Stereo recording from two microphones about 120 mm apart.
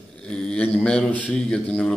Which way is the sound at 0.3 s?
5° left (ahead or behind).